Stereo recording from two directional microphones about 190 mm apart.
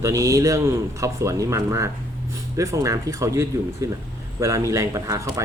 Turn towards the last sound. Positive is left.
turn(degrees=-15)  # may be behind; listen again after turning